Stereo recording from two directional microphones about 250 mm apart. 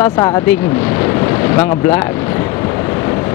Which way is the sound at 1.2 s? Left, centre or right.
Centre.